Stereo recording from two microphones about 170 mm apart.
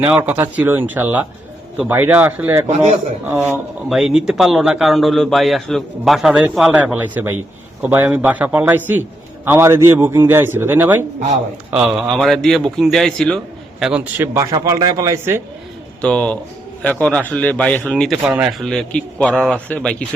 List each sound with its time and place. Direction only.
0.1 s a man's voice: 10° right (ahead or behind)
2.6 s a man's voice: 45° right (ahead or behind)
3.2 s a man's voice: 15° right (ahead or behind)
3.8 s a man's voice: 5° right (ahead or behind)
14.3 s a man's voice: 20° right (ahead or behind)
16.0 s speech: 5° left (ahead or behind)